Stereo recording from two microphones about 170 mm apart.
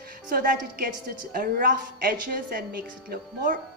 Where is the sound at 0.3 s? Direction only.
55° right (ahead or behind).